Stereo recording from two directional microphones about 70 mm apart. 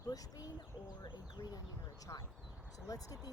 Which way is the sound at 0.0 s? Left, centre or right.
Left.